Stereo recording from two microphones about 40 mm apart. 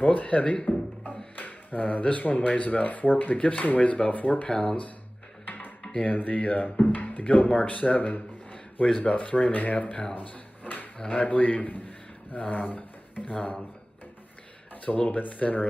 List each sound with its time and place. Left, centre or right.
0.0 s speech: left
1.0 s speech: left
4.5 s speech: centre
6.1 s speech: left
10.1 s drawer open or close: left
11.1 s speech: left
14.9 s speech: left